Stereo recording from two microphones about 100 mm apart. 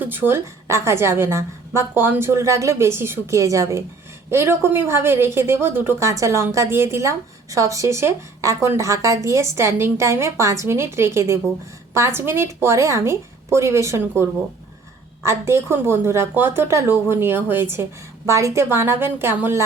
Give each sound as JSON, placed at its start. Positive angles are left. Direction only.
{"t": 0.0, "sound": "speech", "side_deg": -20}